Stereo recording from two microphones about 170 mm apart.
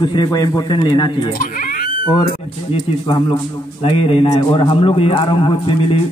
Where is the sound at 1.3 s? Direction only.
55° left (ahead or behind).